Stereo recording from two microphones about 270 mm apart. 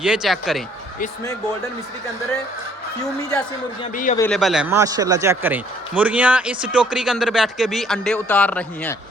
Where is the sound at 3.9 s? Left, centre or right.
Left.